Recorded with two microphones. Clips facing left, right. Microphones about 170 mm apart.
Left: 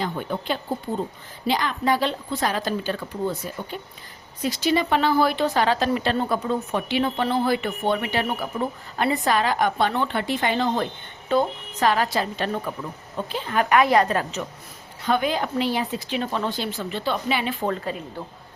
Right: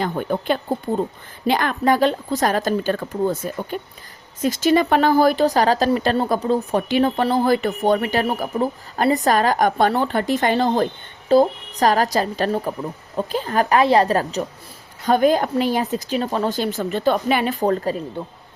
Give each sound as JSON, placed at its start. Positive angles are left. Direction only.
{"t": 0.0, "sound": "a woman's voice", "side_deg": -50}